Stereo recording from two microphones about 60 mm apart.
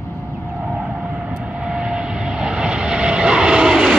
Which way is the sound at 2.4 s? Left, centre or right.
Centre.